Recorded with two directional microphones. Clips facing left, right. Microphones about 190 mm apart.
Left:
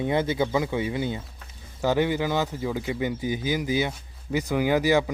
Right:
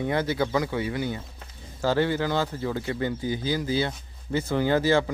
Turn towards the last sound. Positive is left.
turn(degrees=15)  # may be behind; listen again after turning